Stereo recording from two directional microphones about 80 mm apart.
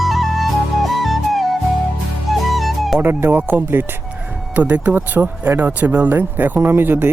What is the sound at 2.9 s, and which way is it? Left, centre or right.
Speech, right.